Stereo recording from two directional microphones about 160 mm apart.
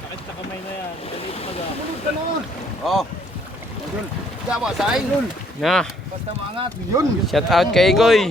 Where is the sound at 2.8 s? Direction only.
Centre (ahead or behind).